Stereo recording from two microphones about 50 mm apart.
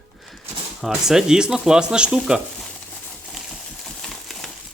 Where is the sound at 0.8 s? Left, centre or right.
Centre.